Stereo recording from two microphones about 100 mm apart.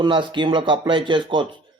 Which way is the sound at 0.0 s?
55° right (ahead or behind).